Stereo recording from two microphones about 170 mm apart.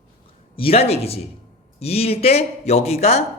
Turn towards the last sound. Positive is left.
turn(degrees=40)  # may be behind; listen again after turning